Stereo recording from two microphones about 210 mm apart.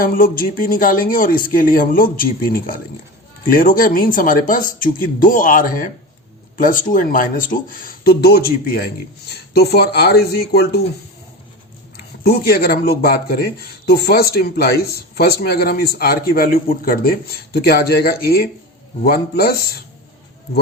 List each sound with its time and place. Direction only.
0.0 s speech: 40° left (ahead or behind)
12.2 s speech: 45° left (ahead or behind)